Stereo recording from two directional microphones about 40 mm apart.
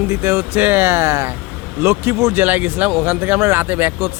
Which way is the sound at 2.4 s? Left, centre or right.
Right.